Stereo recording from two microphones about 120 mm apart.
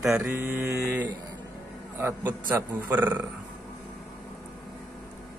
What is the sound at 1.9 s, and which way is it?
Speech, 20° right (ahead or behind).